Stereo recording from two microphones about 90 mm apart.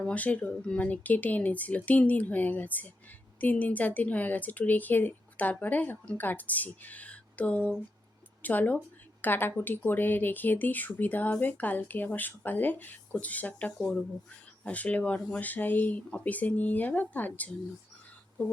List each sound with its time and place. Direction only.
0.0 s a woman's voice: 15° left (ahead or behind)